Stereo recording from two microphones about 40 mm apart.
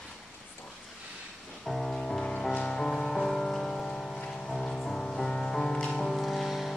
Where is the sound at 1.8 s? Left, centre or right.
Centre.